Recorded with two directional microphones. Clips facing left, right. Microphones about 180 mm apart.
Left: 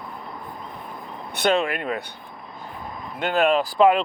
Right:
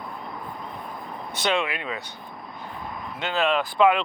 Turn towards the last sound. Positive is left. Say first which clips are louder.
# left 3 dB
turn(degrees=40)  # may be behind; listen again after turning